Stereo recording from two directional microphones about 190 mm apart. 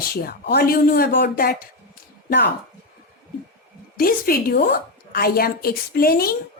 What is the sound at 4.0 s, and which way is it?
Speech, 50° left (ahead or behind).